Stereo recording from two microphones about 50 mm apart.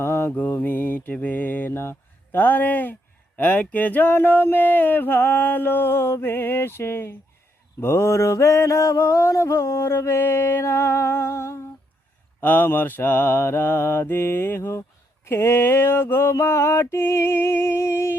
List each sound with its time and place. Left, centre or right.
0.0 s mantra: left
0.3 s mantra: left
1.7 s speech: left
2.4 s mantra: left
10.6 s music: left
12.4 s mantra: left
16.3 s music: left